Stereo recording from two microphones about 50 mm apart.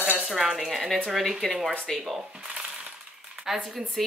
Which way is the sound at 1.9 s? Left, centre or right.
Centre.